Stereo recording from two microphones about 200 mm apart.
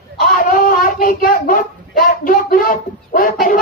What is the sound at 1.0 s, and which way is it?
Speech, 45° left (ahead or behind).